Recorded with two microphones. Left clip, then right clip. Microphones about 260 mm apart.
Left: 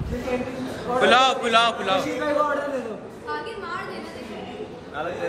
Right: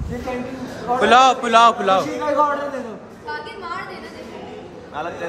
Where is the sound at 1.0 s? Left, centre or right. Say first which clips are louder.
Right 5 dB; centre.